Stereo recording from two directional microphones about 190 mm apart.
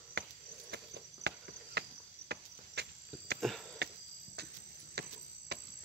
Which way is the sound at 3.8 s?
60° right (ahead or behind).